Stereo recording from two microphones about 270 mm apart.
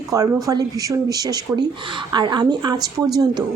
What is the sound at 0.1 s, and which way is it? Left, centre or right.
A woman's voice, centre.